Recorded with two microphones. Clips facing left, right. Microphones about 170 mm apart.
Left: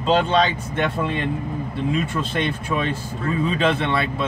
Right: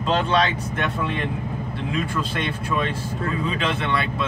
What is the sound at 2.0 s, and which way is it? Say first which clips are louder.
Speech: left 1 dB; 25° left (ahead or behind).